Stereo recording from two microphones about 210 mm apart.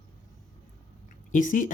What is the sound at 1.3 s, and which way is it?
Speech, 40° left (ahead or behind).